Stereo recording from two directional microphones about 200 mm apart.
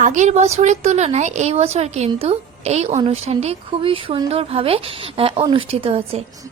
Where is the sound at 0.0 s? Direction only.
35° right (ahead or behind).